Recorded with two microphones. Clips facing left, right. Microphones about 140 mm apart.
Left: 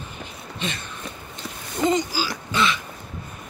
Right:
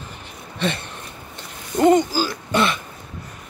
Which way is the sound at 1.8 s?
60° right (ahead or behind).